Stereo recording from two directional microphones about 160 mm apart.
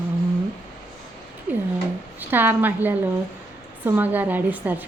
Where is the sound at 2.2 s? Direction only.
10° right (ahead or behind).